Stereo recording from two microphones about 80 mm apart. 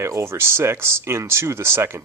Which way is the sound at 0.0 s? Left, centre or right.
Right.